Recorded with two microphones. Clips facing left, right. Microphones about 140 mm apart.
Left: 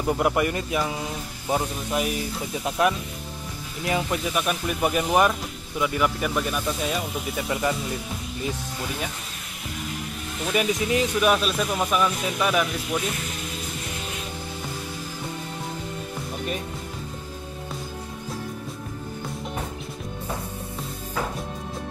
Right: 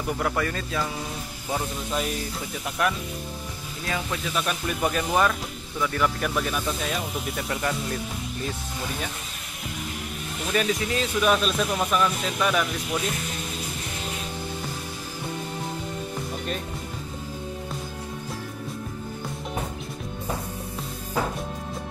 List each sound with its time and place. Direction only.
0.0 s speech: 20° left (ahead or behind)
2.8 s speech: 25° left (ahead or behind)
10.5 s speech: 15° left (ahead or behind)